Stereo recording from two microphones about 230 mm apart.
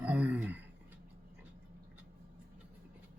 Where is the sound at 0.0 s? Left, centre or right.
Centre.